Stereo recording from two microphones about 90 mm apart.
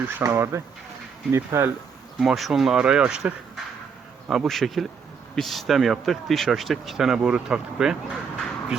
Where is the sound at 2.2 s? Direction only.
Centre (ahead or behind).